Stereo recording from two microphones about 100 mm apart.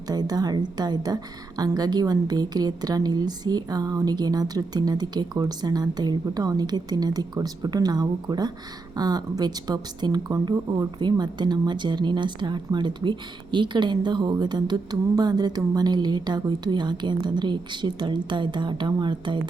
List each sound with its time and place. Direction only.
0.1 s a woman's voice: 40° right (ahead or behind)